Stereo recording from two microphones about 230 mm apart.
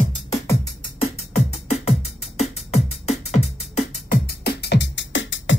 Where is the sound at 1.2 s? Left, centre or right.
Left.